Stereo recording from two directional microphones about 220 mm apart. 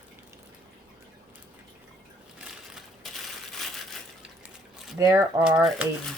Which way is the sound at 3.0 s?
Centre (ahead or behind).